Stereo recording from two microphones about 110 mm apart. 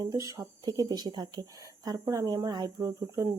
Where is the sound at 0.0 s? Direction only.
30° right (ahead or behind).